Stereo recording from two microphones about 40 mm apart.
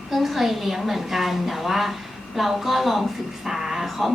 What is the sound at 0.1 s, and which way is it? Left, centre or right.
A woman's voice, centre.